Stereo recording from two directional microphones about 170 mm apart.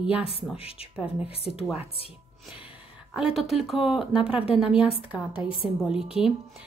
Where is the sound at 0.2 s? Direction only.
35° left (ahead or behind).